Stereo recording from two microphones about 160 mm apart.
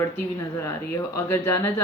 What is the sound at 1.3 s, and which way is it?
Speech, 15° left (ahead or behind).